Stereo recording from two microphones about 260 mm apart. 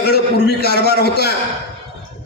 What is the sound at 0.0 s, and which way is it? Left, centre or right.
A man's voice, left.